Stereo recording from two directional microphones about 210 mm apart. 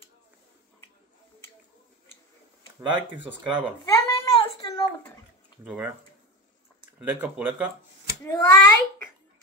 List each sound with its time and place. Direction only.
2.9 s speech: 25° right (ahead or behind)
3.8 s a sound: 15° left (ahead or behind)
5.6 s speech: 5° right (ahead or behind)
7.1 s speech: 5° right (ahead or behind)
8.3 s a child's voice: 10° left (ahead or behind)